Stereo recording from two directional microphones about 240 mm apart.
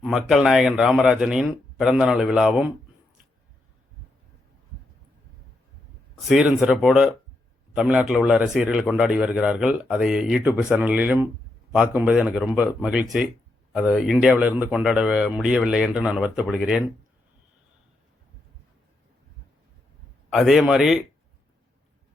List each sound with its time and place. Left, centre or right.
0.0 s a man's voice: centre
6.2 s a man's voice: centre
20.3 s a man's voice: centre